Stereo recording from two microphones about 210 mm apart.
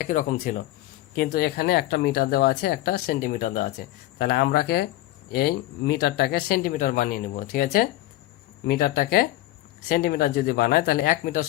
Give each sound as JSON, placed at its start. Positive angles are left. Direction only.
{"t": 0.0, "sound": "speech", "side_deg": 40}